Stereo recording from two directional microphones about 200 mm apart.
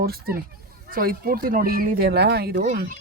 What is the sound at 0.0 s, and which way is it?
Speech, 50° right (ahead or behind).